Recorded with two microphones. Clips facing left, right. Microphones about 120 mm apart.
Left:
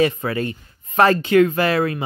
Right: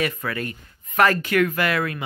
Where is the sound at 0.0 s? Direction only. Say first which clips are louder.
Left 7 dB; 25° left (ahead or behind).